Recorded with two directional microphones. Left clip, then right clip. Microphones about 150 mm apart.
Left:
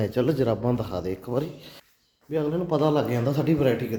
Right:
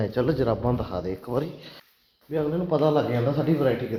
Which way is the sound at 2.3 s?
30° left (ahead or behind).